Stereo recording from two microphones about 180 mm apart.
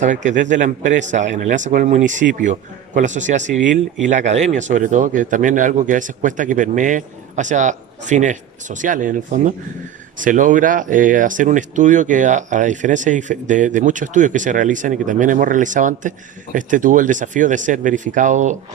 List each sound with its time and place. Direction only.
0.0 s speech: 45° right (ahead or behind)